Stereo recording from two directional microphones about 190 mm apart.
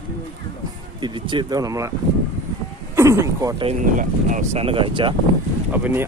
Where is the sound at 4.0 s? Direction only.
40° right (ahead or behind).